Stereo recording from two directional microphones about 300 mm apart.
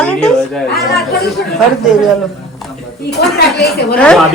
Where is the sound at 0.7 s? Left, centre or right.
Left.